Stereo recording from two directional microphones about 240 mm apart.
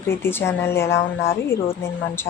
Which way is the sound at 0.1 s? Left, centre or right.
Centre.